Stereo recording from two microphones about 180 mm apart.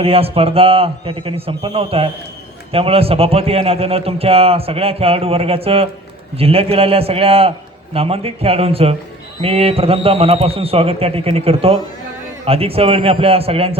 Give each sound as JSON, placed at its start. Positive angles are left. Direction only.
{"t": 0.0, "sound": "a man's voice", "side_deg": -30}